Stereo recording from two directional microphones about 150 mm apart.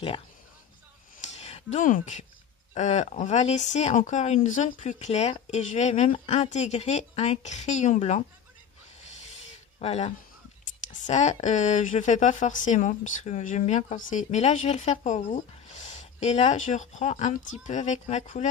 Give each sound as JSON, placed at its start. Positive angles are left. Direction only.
{"t": 1.3, "sound": "a sound", "side_deg": 45}
{"t": 2.7, "sound": "speech", "side_deg": 50}
{"t": 9.8, "sound": "speech", "side_deg": 45}